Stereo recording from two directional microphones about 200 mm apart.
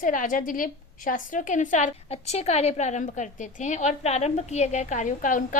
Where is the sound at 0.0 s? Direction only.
40° left (ahead or behind).